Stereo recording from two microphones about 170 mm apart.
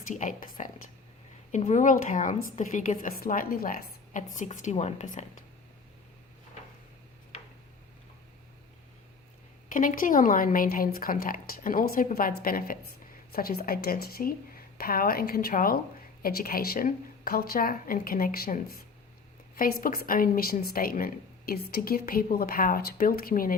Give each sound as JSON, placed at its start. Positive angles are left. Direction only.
{"t": 0.1, "sound": "a woman's voice", "side_deg": 50}
{"t": 9.6, "sound": "a woman's voice", "side_deg": 50}